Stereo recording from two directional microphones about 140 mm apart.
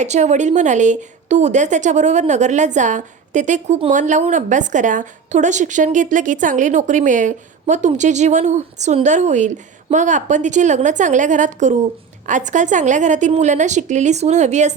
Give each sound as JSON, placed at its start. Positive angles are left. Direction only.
{"t": 0.0, "sound": "a woman's voice", "side_deg": -55}